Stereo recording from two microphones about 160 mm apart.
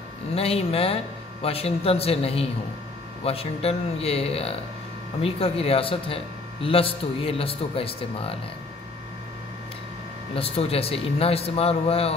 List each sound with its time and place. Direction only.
0.3 s speech: 40° left (ahead or behind)
10.3 s speech: 35° left (ahead or behind)